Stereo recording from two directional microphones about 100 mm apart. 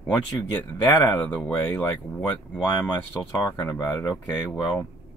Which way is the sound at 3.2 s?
35° left (ahead or behind).